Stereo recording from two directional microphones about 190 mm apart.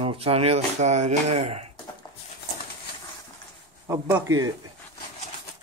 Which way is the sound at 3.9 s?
15° right (ahead or behind).